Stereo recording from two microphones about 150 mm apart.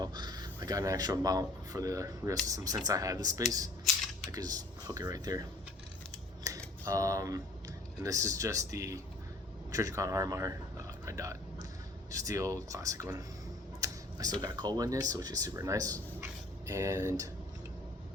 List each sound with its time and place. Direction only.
0.0 s speech: 30° right (ahead or behind)
6.5 s typing: 25° right (ahead or behind)
6.9 s speech: 20° right (ahead or behind)
13.8 s a sound: 25° right (ahead or behind)
14.4 s speech: 25° right (ahead or behind)